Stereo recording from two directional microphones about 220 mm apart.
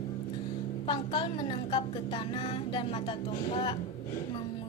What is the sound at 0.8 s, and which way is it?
Speech, 20° left (ahead or behind).